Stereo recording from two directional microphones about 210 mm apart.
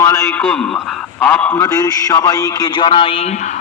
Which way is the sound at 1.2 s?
10° left (ahead or behind).